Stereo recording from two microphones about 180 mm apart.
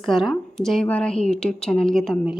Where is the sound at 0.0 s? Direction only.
Centre (ahead or behind).